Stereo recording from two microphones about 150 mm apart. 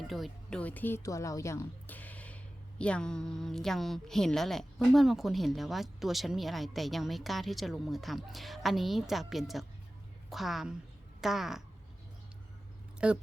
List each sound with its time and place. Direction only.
0.1 s speech: 5° left (ahead or behind)
13.0 s speech: 5° right (ahead or behind)